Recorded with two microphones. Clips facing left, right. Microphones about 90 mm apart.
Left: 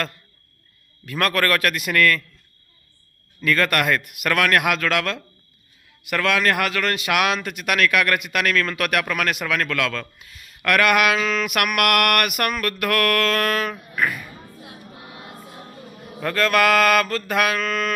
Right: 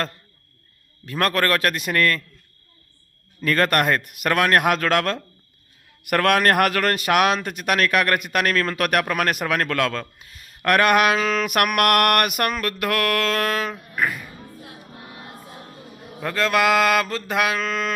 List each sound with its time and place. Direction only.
1.0 s mantra: 30° right (ahead or behind)
3.4 s a man's voice: 40° right (ahead or behind)
6.1 s a man's voice: 50° right (ahead or behind); by 14.3 s 20° right (ahead or behind)
16.2 s mantra: 15° right (ahead or behind)